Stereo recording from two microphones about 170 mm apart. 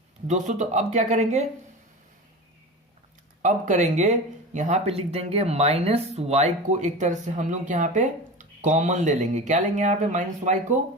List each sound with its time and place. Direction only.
0.3 s speech: 45° right (ahead or behind)
3.4 s speech: 45° right (ahead or behind)